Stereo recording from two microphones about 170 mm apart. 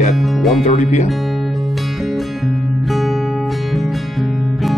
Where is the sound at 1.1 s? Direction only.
Centre (ahead or behind).